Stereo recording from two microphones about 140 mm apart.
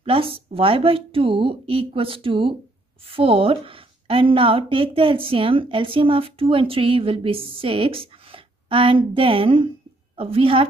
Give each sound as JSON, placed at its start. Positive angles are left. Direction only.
{"t": 0.0, "sound": "a woman's voice", "side_deg": -40}